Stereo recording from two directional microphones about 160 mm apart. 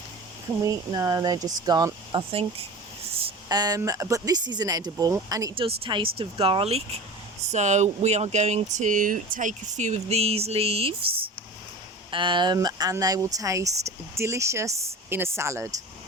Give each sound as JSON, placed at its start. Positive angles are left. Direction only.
{"t": 0.6, "sound": "speech", "side_deg": -20}
{"t": 5.5, "sound": "speech", "side_deg": -35}
{"t": 12.1, "sound": "speech", "side_deg": -30}